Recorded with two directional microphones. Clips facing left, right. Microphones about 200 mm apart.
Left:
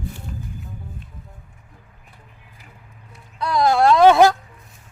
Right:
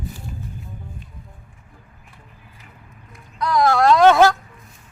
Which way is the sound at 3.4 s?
25° left (ahead or behind).